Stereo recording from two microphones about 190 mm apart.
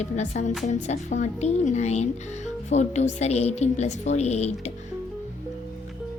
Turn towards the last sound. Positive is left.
turn(degrees=35)  # may be behind; listen again after turning